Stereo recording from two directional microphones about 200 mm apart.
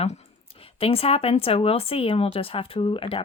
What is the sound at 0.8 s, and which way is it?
Speech, 30° left (ahead or behind).